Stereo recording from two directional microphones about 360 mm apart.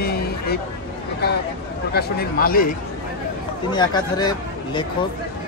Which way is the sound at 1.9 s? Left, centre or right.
Left.